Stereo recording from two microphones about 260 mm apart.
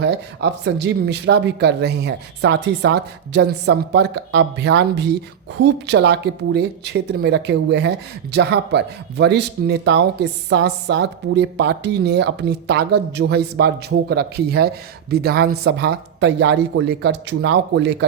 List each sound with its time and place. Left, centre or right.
0.0 s speech: right